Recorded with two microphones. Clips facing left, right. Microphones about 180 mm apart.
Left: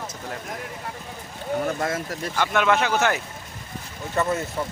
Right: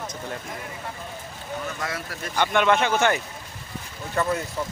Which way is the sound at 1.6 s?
50° left (ahead or behind).